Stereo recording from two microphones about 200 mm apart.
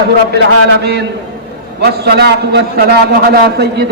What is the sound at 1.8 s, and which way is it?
A man's voice, 55° right (ahead or behind).